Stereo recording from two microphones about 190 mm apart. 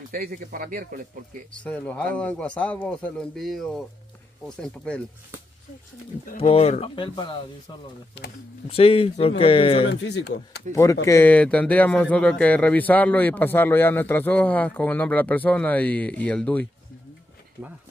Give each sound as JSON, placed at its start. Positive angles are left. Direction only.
{"t": 0.1, "sound": "speech", "side_deg": -50}
{"t": 1.6, "sound": "speech", "side_deg": 10}
{"t": 6.3, "sound": "speech", "side_deg": 30}
{"t": 8.6, "sound": "speech", "side_deg": 30}
{"t": 9.8, "sound": "speech", "side_deg": 65}
{"t": 10.7, "sound": "speech", "side_deg": 15}